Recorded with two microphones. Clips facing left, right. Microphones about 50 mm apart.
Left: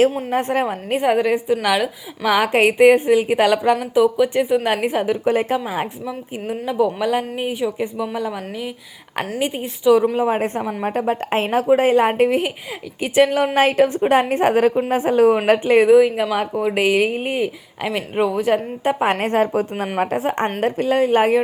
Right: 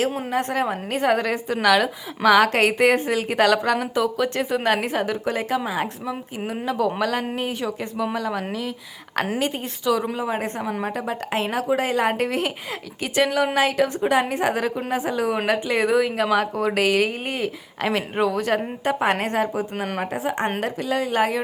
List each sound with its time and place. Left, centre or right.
0.3 s speech: left
0.9 s a woman's voice: centre
9.4 s a woman's voice: centre
10.2 s speech: left
10.6 s a woman's voice: centre
10.8 s speech: left
15.9 s a woman's voice: centre
19.2 s speech: left